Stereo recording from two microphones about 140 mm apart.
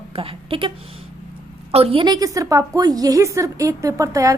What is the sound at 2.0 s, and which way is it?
A woman's voice, 25° right (ahead or behind).